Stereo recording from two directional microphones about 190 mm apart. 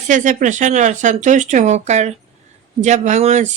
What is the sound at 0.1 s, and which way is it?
Speech, 40° right (ahead or behind).